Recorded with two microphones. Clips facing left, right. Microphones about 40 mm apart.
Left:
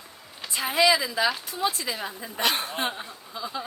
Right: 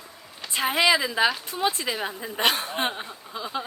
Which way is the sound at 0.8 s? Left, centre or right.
Right.